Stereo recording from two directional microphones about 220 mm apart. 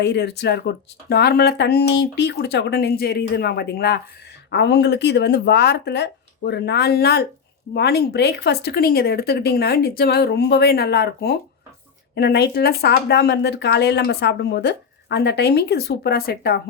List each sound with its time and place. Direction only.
0.0 s speech: 50° left (ahead or behind)